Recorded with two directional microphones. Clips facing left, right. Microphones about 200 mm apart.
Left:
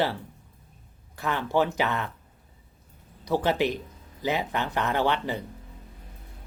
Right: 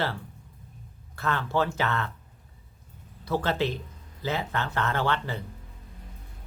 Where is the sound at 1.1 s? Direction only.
15° left (ahead or behind).